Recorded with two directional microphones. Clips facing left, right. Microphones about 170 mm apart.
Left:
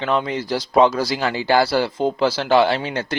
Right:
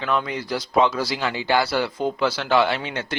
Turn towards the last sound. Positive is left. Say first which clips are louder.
# left 4 dB
turn(degrees=35)  # may be behind; listen again after turning